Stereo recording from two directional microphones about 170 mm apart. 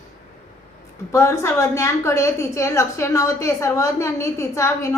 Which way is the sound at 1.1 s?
15° left (ahead or behind).